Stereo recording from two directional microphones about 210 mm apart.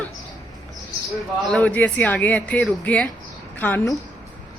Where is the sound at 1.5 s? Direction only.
5° left (ahead or behind).